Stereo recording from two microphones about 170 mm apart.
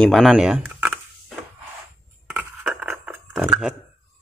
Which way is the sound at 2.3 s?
10° right (ahead or behind).